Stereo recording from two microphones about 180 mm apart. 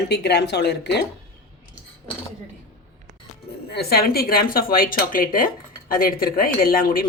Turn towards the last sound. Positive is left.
turn(degrees=55)  # may be behind; listen again after turning